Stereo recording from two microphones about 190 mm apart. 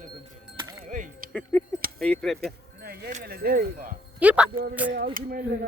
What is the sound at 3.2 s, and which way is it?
Speech, 55° right (ahead or behind).